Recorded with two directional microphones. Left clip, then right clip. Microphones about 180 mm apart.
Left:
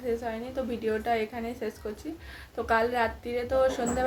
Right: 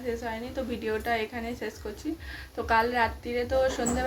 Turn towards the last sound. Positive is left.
turn(degrees=5)  # may be behind; listen again after turning